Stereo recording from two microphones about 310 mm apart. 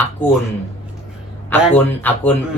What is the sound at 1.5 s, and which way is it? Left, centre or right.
Speech, centre.